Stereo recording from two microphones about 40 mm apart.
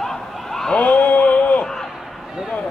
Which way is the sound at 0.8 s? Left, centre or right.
Left.